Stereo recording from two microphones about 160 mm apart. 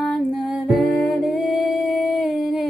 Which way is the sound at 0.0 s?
Centre (ahead or behind).